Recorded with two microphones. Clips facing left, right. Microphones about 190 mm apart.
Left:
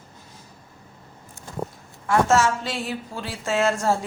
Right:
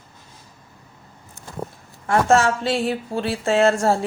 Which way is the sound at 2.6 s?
30° right (ahead or behind).